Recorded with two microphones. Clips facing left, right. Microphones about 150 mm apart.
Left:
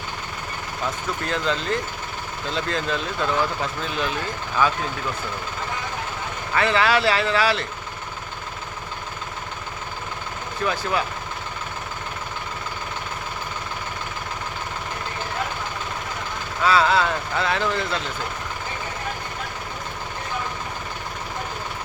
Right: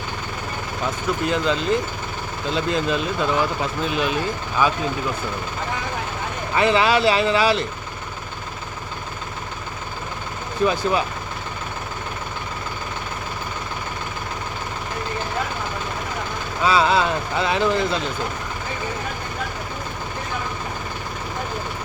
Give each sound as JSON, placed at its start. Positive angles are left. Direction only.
{"t": 1.2, "sound": "speech", "side_deg": -15}
{"t": 6.5, "sound": "speech", "side_deg": -20}
{"t": 10.6, "sound": "speech", "side_deg": -20}
{"t": 16.6, "sound": "speech", "side_deg": -20}